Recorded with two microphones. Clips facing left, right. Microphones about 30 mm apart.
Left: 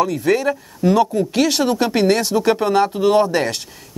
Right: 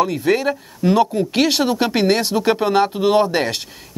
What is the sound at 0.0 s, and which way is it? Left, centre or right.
Speech, right.